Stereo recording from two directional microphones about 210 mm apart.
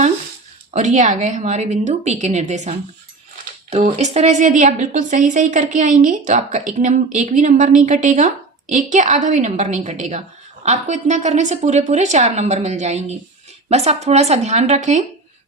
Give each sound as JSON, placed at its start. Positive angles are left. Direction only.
{"t": 0.7, "sound": "a woman's voice", "side_deg": -35}